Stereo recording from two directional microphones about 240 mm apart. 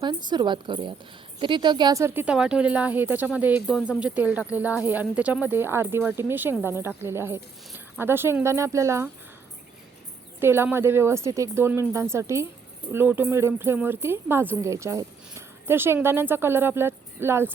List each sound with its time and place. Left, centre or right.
0.0 s speech: centre
10.4 s speech: centre